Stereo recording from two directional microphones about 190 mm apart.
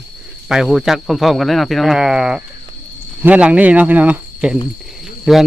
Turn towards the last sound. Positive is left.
turn(degrees=0)  # may be behind; listen again after turning